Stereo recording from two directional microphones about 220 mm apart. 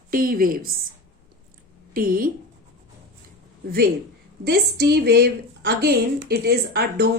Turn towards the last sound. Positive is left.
turn(degrees=-45)  # may be behind; listen again after turning